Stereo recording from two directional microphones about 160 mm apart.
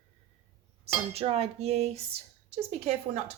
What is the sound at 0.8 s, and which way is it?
Speech, 40° right (ahead or behind).